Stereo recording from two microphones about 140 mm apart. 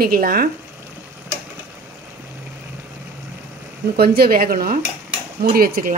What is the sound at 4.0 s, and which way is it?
A woman's voice, 90° right.